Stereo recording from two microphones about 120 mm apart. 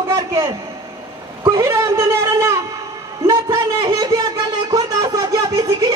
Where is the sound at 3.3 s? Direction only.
35° right (ahead or behind).